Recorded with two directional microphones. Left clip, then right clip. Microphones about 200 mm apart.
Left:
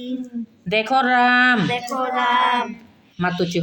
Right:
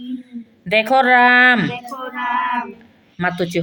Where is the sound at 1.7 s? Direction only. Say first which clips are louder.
Left 6 dB; 55° left (ahead or behind).